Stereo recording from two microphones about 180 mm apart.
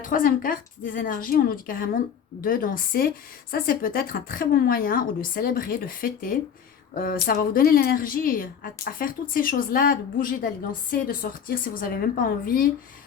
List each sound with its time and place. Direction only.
0.0 s a woman's voice: 50° left (ahead or behind)